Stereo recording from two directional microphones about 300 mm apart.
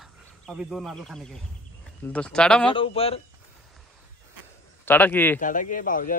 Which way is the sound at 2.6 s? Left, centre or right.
Centre.